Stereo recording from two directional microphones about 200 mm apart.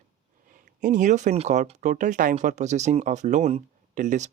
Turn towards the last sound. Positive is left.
turn(degrees=-40)  # may be behind; listen again after turning